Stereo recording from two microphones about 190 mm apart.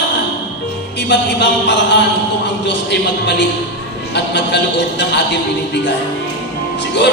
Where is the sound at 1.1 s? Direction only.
65° left (ahead or behind).